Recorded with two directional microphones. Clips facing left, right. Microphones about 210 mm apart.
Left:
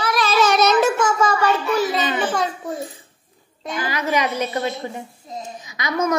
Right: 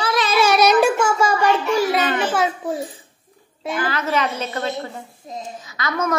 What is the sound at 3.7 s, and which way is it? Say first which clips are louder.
A woman's voice: even; 10° left (ahead or behind).